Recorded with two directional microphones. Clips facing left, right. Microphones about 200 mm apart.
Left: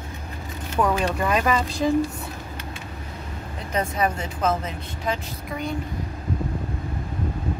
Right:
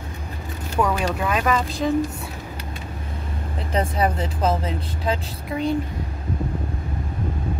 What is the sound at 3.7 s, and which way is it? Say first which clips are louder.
A woman's voice: right 2 dB; 30° right (ahead or behind).